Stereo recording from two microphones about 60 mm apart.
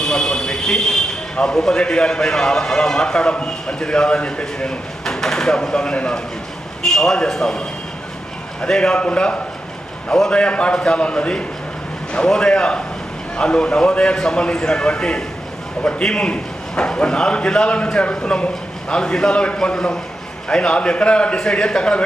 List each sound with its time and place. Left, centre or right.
0.0 s a sound: centre
1.4 s a man's voice: centre
8.6 s a man's voice: centre